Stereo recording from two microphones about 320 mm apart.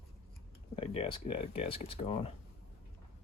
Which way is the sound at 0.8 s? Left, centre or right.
Centre.